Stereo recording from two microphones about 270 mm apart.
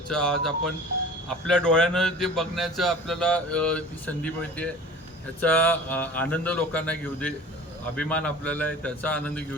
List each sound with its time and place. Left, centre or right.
0.1 s a man's voice: centre